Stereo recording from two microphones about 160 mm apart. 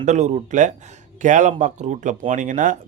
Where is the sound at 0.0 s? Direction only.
45° right (ahead or behind).